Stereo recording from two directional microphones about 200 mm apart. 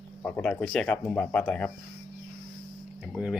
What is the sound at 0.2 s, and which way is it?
Speech, 10° left (ahead or behind).